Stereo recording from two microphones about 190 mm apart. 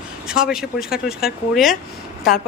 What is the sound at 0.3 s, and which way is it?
A woman's voice, 5° right (ahead or behind).